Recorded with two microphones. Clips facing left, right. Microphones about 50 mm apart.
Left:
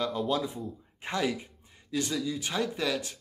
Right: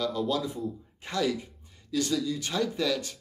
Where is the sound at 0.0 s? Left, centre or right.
Left.